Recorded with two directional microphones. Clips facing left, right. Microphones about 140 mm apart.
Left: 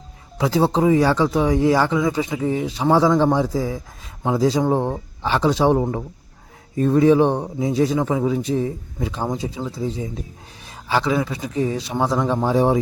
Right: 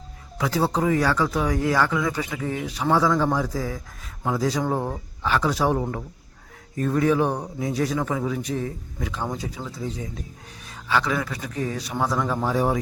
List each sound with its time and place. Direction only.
0.3 s speech: 25° left (ahead or behind)